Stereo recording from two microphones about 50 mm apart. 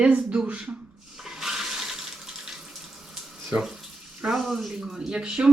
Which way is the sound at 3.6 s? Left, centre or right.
Centre.